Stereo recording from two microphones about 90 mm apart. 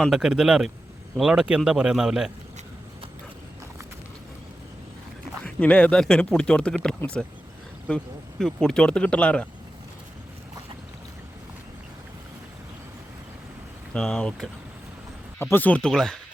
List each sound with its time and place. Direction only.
0.1 s speech: 5° right (ahead or behind)
5.5 s speech: 15° left (ahead or behind)
7.0 s speech: 30° left (ahead or behind)
7.9 s speech: 10° left (ahead or behind)
13.9 s speech: 5° left (ahead or behind)
15.4 s speech: 25° left (ahead or behind); by 16.1 s 5° left (ahead or behind)